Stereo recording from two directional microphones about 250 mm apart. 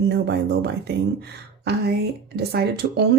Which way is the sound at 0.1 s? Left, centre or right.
Right.